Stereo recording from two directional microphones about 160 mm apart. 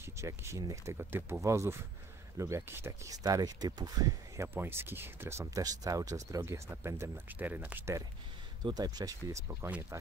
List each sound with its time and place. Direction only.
0.0 s speech: 15° right (ahead or behind)
8.6 s speech: 25° right (ahead or behind)
9.5 s speech: 15° right (ahead or behind)